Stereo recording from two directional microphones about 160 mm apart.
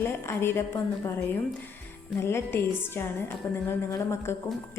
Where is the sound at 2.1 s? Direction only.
15° left (ahead or behind).